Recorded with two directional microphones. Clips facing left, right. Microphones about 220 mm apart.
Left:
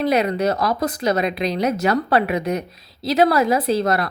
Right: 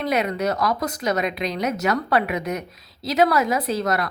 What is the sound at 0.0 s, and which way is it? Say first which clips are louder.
A woman's voice: left 4 dB; 30° left (ahead or behind).